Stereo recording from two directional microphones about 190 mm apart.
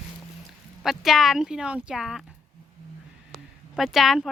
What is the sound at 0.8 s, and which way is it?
Speech, centre (ahead or behind).